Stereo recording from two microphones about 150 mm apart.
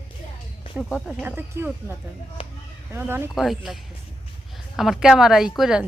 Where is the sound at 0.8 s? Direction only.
5° right (ahead or behind).